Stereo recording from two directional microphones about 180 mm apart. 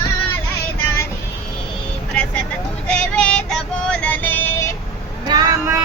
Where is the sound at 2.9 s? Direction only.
5° left (ahead or behind).